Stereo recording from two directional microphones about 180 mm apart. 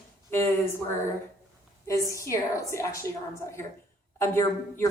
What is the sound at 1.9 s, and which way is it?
A woman's voice, 20° left (ahead or behind).